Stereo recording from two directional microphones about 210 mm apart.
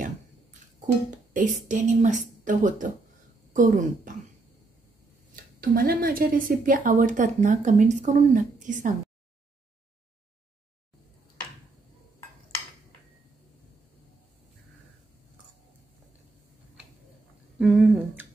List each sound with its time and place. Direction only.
1.3 s speech: 35° right (ahead or behind)
5.3 s speech: 45° right (ahead or behind)
17.6 s humming: centre (ahead or behind)